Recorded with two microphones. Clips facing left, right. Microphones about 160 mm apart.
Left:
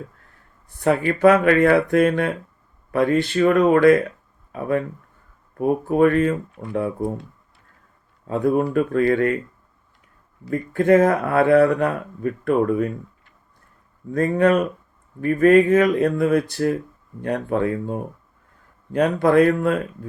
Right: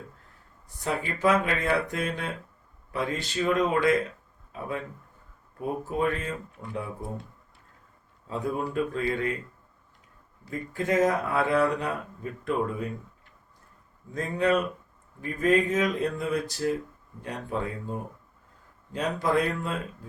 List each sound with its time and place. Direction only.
0.9 s speech: 60° left (ahead or behind)
8.3 s speech: 65° left (ahead or behind)
10.5 s speech: 60° left (ahead or behind)
14.1 s speech: 60° left (ahead or behind)
18.9 s speech: 60° left (ahead or behind)